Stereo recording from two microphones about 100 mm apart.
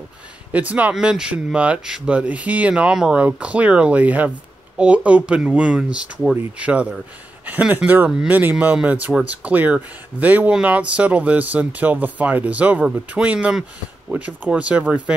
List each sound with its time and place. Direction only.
0.5 s speech: 15° right (ahead or behind)